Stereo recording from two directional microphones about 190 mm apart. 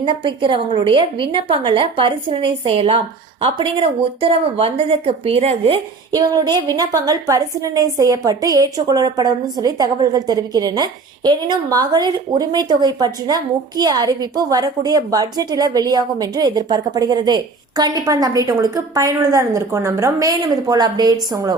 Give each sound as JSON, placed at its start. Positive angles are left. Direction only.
{"t": 0.0, "sound": "a woman's voice", "side_deg": -25}
{"t": 6.1, "sound": "a woman's voice", "side_deg": -20}